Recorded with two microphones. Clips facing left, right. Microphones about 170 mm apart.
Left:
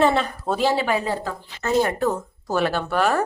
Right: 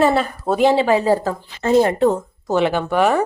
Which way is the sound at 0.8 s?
35° right (ahead or behind).